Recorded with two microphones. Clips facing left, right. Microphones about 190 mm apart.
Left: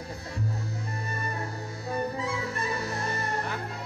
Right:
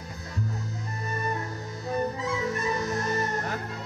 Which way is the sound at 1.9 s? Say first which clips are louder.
Right 2 dB; 30° left (ahead or behind).